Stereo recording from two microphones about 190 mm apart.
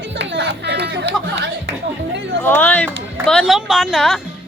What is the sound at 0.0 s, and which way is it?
Music, 70° right (ahead or behind).